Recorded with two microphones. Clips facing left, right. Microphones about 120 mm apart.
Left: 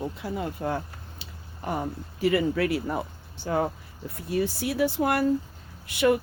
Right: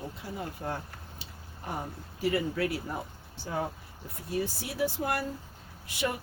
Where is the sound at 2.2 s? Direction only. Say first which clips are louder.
Left 5 dB; 80° left.